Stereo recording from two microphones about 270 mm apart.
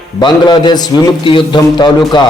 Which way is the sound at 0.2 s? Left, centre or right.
Centre.